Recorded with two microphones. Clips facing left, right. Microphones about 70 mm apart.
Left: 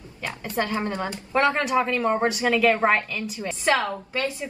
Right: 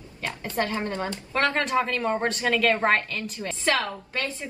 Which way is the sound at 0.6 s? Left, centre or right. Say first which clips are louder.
Left 1 dB; centre.